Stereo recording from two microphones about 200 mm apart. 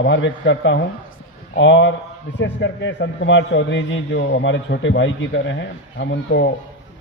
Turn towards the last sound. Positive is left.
turn(degrees=60)  # may be behind; listen again after turning